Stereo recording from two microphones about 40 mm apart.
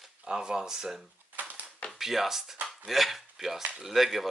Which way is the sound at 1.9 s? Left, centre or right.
Centre.